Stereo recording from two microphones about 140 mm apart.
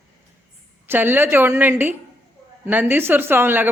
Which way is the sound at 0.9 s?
15° right (ahead or behind).